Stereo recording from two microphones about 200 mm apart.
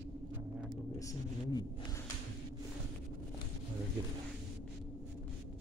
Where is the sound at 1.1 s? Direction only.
20° left (ahead or behind).